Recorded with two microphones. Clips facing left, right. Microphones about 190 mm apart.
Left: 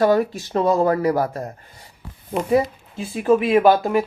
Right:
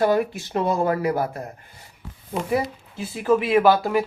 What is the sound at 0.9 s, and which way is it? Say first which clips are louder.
Speech: left 3 dB; 40° left (ahead or behind).